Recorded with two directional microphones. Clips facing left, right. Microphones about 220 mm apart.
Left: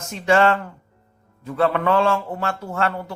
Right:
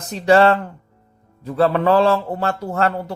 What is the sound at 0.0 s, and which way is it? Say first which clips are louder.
A man's voice: right 4 dB; 35° right (ahead or behind).